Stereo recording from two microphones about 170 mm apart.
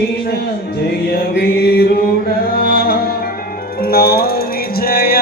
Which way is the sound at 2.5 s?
60° left (ahead or behind).